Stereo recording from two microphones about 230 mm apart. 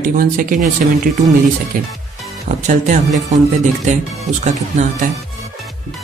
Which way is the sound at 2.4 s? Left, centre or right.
Right.